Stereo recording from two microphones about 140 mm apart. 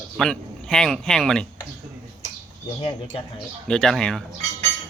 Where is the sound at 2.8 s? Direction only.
40° left (ahead or behind).